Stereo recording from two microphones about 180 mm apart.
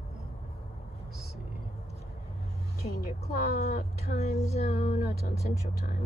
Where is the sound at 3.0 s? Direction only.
55° left (ahead or behind).